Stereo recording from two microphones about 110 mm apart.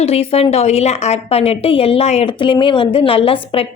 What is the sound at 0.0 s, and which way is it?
Speech, 65° left (ahead or behind).